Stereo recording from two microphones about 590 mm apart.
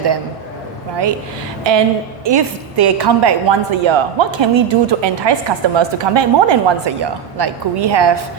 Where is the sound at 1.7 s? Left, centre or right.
Right.